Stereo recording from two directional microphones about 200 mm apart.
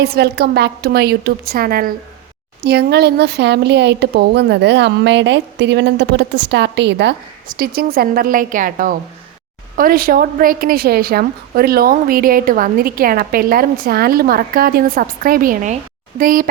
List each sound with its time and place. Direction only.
0.1 s a woman's voice: 55° right (ahead or behind)